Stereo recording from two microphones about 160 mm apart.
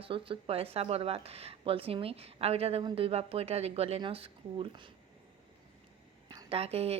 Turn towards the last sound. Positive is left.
turn(degrees=-40)  # may be behind; listen again after turning